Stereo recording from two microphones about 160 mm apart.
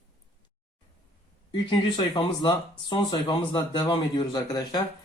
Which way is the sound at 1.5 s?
30° left (ahead or behind).